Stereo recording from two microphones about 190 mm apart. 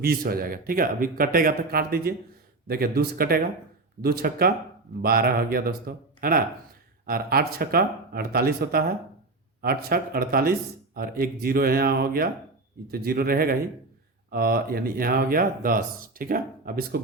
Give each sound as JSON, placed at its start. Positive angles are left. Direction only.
{"t": 0.0, "sound": "speech", "side_deg": -55}